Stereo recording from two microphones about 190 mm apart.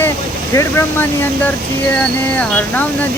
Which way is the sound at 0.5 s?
15° left (ahead or behind).